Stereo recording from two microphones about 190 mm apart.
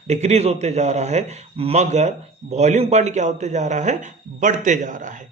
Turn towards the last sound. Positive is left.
turn(degrees=-40)  # may be behind; listen again after turning